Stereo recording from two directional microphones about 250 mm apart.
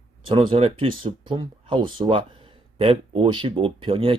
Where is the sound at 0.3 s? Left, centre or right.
Centre.